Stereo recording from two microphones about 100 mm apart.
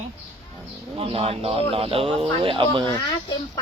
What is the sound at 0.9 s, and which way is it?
Speech, 80° right.